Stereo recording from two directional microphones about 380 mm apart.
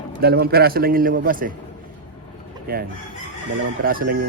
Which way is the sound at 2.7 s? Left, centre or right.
Right.